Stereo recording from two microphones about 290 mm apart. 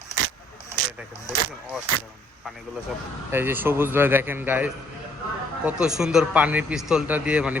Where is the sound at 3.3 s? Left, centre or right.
Centre.